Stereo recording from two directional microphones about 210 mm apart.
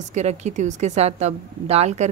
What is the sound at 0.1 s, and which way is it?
Speech, 35° right (ahead or behind).